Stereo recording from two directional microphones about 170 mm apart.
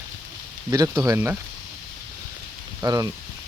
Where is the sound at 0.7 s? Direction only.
20° right (ahead or behind).